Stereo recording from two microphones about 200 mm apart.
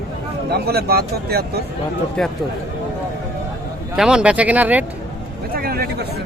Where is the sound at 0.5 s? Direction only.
50° right (ahead or behind).